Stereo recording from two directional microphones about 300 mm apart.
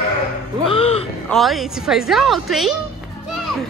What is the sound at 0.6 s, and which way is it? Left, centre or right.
Music, centre.